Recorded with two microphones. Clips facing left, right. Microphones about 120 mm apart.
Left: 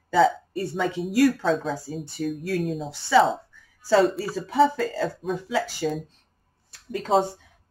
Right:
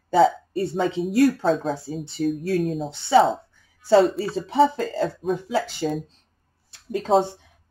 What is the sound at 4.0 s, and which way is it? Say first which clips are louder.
Speech: right 1 dB; centre (ahead or behind).